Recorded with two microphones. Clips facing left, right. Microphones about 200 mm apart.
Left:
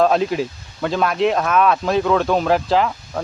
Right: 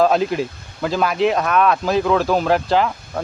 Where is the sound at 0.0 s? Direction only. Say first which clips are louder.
Even; centre (ahead or behind).